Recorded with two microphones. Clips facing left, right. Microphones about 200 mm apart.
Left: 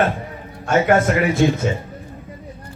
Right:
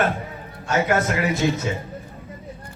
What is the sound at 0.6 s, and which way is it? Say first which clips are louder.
Speech: left 5 dB; 55° left (ahead or behind).